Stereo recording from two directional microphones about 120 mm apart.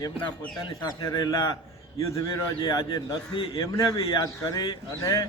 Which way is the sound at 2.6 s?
40° left (ahead or behind).